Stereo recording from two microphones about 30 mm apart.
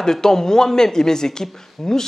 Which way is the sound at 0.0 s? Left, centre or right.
Centre.